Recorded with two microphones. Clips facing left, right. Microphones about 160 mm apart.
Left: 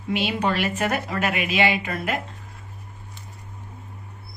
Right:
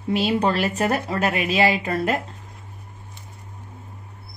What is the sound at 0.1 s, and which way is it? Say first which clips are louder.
A woman's voice: right 3 dB; 35° right (ahead or behind).